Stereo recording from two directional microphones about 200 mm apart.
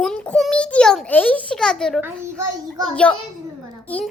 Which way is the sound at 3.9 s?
5° left (ahead or behind).